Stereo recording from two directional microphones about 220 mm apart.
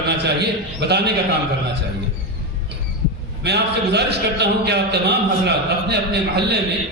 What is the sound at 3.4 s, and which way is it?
A man's voice, 50° right (ahead or behind).